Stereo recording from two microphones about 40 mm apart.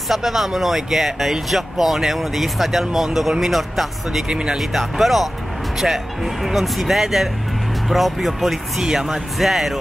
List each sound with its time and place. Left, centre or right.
0.1 s speech: centre
4.3 s speech: right
4.6 s speech: centre